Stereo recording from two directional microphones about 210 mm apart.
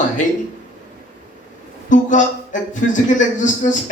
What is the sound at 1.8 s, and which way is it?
Speech, 35° left (ahead or behind).